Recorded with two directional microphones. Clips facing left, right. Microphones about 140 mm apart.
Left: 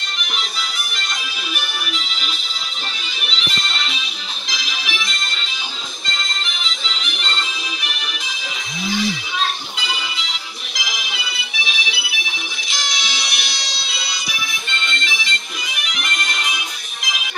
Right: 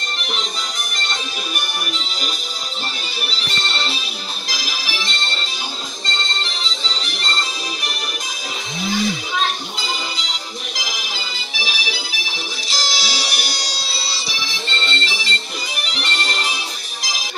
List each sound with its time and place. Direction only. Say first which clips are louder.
0.6 s music: even; 35° right (ahead or behind)
9.8 s music: right 1 dB; 40° right (ahead or behind)